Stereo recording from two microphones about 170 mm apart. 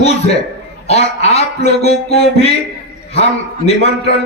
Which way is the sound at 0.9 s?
40° left (ahead or behind).